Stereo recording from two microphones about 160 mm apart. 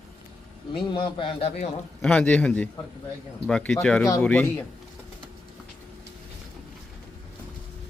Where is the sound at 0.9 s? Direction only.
30° left (ahead or behind).